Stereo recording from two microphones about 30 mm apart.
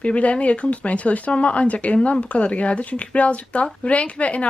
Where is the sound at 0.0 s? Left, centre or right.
Left.